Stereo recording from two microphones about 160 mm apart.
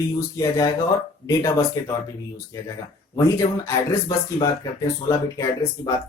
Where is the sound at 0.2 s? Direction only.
20° left (ahead or behind).